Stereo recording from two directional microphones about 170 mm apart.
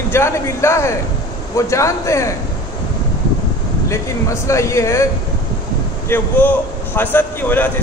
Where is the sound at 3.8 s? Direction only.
15° left (ahead or behind).